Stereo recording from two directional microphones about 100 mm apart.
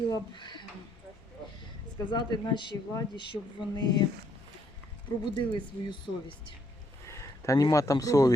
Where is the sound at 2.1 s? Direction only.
45° left (ahead or behind).